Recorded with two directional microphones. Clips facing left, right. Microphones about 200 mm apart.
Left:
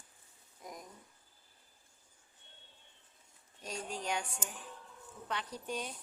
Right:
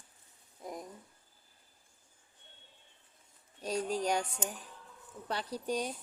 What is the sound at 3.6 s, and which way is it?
Speech, 35° right (ahead or behind).